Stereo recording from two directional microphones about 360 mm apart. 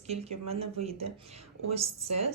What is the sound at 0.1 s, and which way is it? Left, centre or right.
Speech, centre.